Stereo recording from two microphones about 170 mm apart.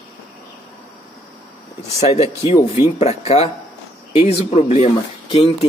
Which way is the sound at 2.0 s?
40° left (ahead or behind).